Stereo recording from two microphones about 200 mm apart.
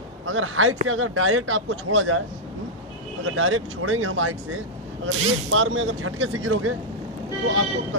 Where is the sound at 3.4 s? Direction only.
85° right.